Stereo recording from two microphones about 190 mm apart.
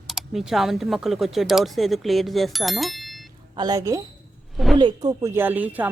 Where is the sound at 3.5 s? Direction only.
20° right (ahead or behind).